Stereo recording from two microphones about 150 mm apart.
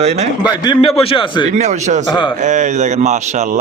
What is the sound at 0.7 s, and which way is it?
Speech, 40° left (ahead or behind).